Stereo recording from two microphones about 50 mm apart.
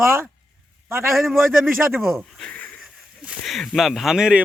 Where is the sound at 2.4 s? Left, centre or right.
Left.